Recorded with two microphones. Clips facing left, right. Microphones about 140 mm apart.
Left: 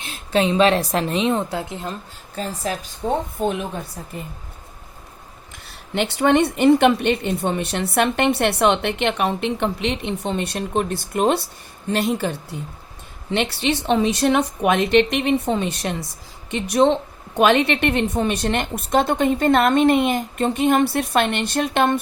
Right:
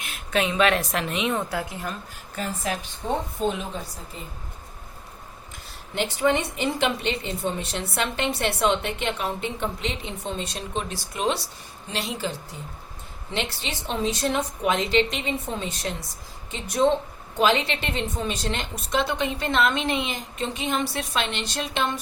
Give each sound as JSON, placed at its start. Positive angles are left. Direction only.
{"t": 0.0, "sound": "speech", "side_deg": 30}
{"t": 5.9, "sound": "a woman's voice", "side_deg": 70}